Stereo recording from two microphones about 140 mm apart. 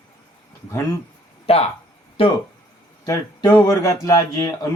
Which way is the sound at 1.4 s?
45° left (ahead or behind).